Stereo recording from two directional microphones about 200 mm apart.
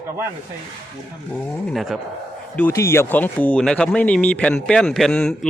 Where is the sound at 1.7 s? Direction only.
Centre (ahead or behind).